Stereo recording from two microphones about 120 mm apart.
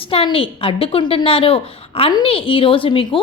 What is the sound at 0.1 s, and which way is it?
A woman's voice, 50° left (ahead or behind).